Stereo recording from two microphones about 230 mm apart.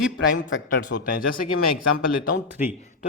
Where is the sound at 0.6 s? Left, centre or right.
Left.